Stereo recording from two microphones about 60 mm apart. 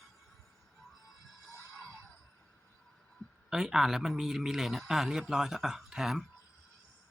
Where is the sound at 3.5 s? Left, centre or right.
Centre.